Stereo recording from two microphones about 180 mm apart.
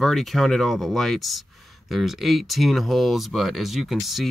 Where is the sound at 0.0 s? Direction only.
Centre (ahead or behind).